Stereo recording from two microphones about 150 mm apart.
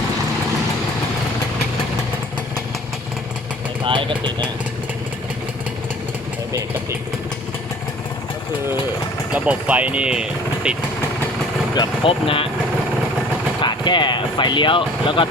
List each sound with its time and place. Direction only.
3.8 s speech: 35° right (ahead or behind)
9.3 s speech: 10° right (ahead or behind)
11.7 s speech: 35° left (ahead or behind)
13.6 s speech: 30° left (ahead or behind)